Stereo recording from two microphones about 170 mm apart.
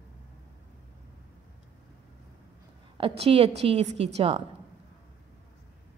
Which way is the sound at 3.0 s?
35° right (ahead or behind).